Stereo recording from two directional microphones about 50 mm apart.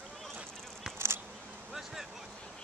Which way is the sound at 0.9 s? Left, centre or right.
Right.